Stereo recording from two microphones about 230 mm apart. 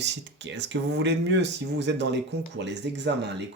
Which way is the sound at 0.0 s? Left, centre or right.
Right.